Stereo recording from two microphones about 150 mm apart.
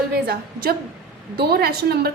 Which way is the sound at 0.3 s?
90° right.